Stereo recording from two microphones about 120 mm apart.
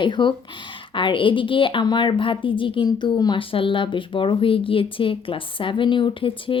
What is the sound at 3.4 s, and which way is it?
A woman's voice, 50° left (ahead or behind).